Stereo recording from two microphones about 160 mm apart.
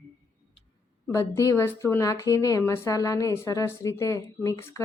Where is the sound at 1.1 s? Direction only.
20° left (ahead or behind).